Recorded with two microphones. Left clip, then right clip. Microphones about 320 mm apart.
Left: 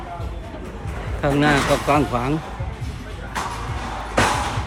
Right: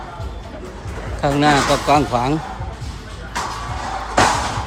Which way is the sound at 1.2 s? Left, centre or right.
Centre.